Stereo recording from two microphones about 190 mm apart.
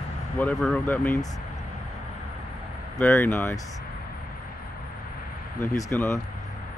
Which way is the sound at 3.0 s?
10° left (ahead or behind).